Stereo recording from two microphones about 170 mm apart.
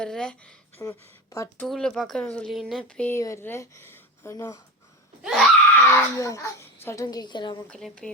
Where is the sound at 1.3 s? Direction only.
20° left (ahead or behind).